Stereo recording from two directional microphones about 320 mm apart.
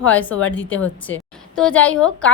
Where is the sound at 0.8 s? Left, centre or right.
Centre.